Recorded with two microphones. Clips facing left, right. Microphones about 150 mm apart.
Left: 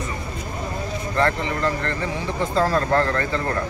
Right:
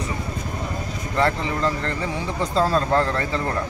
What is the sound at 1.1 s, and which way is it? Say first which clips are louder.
Speech: even; 15° right (ahead or behind).